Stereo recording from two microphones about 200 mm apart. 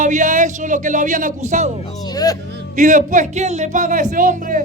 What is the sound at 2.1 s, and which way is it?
Music, 20° left (ahead or behind).